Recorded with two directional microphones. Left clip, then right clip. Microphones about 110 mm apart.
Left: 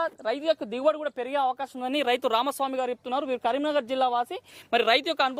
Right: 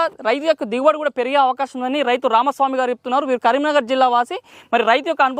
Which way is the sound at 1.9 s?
60° left (ahead or behind).